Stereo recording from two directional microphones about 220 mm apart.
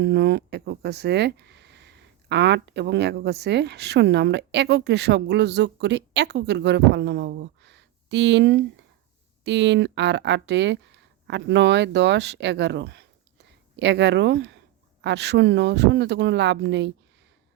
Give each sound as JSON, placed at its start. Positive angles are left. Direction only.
{"t": 0.0, "sound": "speech", "side_deg": -50}